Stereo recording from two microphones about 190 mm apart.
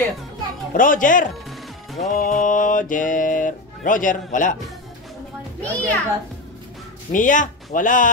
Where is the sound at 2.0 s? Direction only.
45° left (ahead or behind).